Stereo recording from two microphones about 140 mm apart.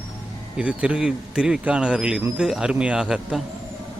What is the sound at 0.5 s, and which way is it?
A man's voice, 10° right (ahead or behind).